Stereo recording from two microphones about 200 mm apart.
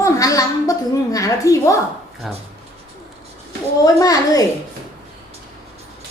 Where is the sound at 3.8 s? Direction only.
20° left (ahead or behind).